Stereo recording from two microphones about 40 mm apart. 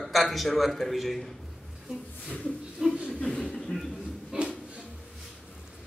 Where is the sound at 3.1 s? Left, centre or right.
Left.